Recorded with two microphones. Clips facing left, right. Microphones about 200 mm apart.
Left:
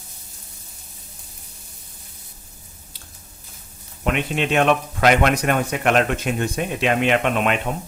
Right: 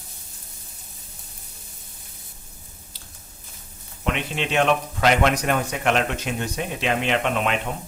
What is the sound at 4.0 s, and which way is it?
Speech, 50° left (ahead or behind).